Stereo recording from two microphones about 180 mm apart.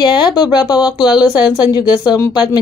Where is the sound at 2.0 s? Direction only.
20° left (ahead or behind).